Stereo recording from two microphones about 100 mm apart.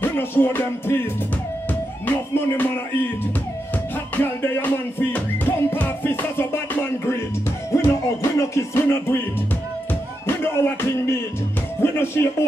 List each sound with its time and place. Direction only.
0.0 s music: 20° left (ahead or behind)
2.0 s music: 20° left (ahead or behind)
4.2 s music: 20° left (ahead or behind)
10.2 s music: 25° left (ahead or behind)
11.8 s speech: 25° left (ahead or behind)